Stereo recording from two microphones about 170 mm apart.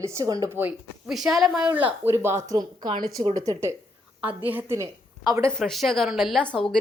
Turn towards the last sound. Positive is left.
turn(degrees=5)  # may be behind; listen again after turning